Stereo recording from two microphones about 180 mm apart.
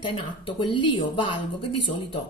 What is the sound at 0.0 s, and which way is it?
Speech, 30° left (ahead or behind).